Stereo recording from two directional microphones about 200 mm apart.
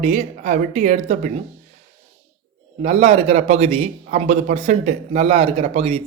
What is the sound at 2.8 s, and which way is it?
A man's voice, 35° right (ahead or behind).